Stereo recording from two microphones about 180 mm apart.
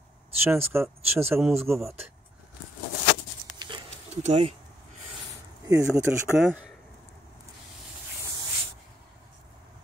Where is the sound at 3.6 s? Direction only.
25° right (ahead or behind).